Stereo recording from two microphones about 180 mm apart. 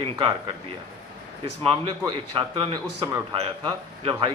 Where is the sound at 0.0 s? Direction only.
30° right (ahead or behind).